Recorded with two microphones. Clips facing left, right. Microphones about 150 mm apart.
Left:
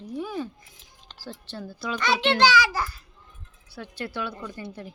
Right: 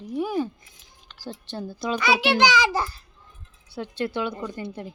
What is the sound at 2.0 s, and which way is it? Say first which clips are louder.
A child's voice: even; 5° right (ahead or behind).